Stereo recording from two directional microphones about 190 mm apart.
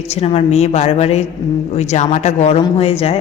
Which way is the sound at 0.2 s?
30° left (ahead or behind).